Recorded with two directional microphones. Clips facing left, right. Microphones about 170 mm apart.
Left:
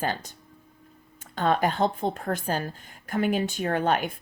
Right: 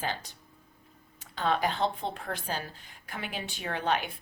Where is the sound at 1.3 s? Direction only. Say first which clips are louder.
Left 5 dB; 50° left (ahead or behind).